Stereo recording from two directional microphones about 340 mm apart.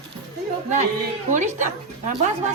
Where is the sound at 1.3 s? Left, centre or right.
Right.